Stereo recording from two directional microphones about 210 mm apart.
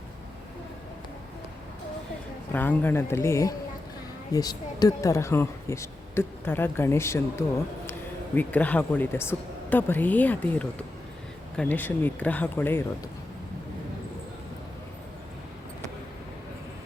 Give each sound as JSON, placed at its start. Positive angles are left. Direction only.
{"t": 2.5, "sound": "speech", "side_deg": 10}